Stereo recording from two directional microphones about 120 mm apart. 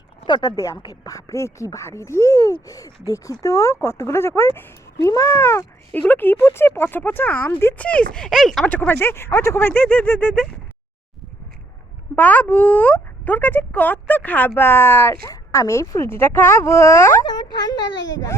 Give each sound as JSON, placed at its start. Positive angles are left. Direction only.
{"t": 0.3, "sound": "speech", "side_deg": 35}
{"t": 8.6, "sound": "speech", "side_deg": 15}
{"t": 12.1, "sound": "speech", "side_deg": 15}
{"t": 17.2, "sound": "speech", "side_deg": 35}